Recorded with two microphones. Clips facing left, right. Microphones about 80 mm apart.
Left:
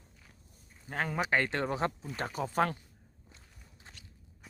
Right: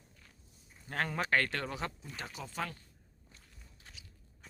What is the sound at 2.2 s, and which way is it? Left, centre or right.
Speech, left.